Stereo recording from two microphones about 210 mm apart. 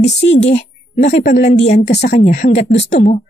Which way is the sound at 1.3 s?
40° left (ahead or behind).